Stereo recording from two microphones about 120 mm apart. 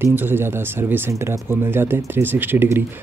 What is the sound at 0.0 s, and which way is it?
Speech, 15° right (ahead or behind).